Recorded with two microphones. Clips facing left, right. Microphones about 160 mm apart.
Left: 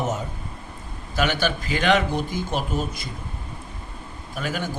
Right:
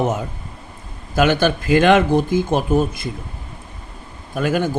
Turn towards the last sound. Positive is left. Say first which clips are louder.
# right 9 dB
turn(degrees=-50)  # may be behind; listen again after turning